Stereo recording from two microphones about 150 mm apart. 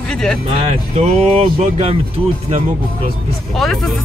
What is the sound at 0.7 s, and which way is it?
Speech, 45° right (ahead or behind).